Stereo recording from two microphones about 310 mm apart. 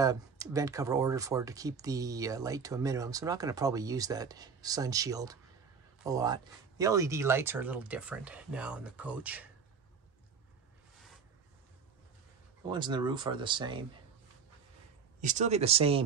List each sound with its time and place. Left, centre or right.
0.0 s speech: centre
12.6 s speech: centre
15.1 s speech: right